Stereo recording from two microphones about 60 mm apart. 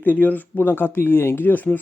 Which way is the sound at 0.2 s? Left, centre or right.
Left.